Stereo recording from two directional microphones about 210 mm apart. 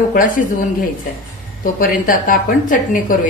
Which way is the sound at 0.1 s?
40° left (ahead or behind).